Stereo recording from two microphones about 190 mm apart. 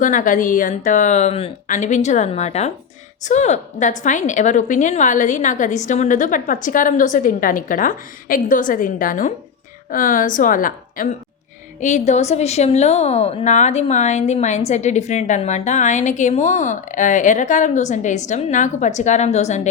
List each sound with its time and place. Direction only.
0.0 s a woman's voice: 45° left (ahead or behind)